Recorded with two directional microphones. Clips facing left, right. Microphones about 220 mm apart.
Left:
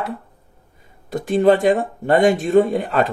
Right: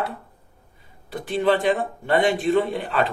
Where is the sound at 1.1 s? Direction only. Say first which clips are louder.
Left 6 dB; 45° left (ahead or behind).